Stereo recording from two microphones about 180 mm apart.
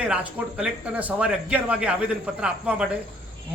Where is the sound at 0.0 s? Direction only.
5° right (ahead or behind).